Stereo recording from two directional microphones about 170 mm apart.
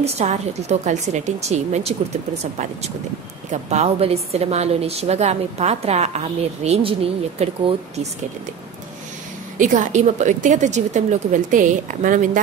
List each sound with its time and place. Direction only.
0.0 s a woman's voice: 40° right (ahead or behind)
9.6 s a woman's voice: 50° right (ahead or behind)